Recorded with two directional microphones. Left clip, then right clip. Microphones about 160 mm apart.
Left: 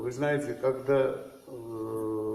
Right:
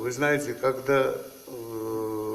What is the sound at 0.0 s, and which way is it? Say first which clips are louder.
Speech: right 4 dB; 30° right (ahead or behind).